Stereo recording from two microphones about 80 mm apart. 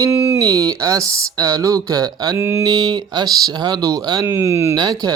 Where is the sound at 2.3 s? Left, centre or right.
Right.